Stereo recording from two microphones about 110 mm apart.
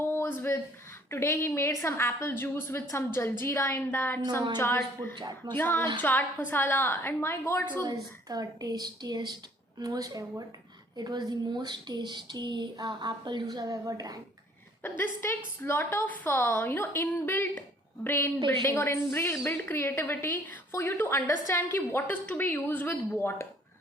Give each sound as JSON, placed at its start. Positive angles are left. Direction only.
{"t": 0.0, "sound": "a sound", "side_deg": 20}
{"t": 1.1, "sound": "a woman's voice", "side_deg": 25}
{"t": 5.1, "sound": "speech", "side_deg": -45}
{"t": 5.5, "sound": "a woman's voice", "side_deg": 20}
{"t": 7.9, "sound": "speech", "side_deg": -35}
{"t": 14.8, "sound": "a woman's voice", "side_deg": 20}